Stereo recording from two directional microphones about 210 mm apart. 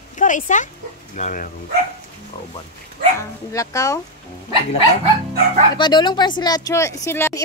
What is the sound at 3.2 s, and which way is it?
Speech, 15° left (ahead or behind).